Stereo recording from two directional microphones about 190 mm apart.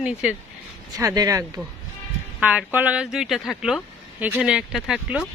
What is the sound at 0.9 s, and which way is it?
Speech, 20° right (ahead or behind).